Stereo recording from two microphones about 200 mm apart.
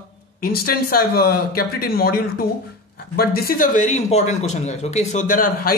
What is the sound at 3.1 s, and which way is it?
A man's voice, 50° left (ahead or behind).